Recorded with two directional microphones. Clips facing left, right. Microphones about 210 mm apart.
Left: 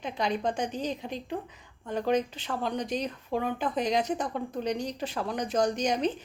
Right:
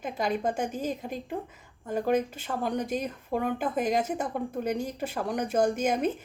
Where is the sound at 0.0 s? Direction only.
5° right (ahead or behind).